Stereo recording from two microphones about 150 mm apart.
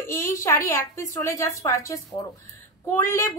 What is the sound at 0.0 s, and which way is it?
A woman's voice, 20° left (ahead or behind).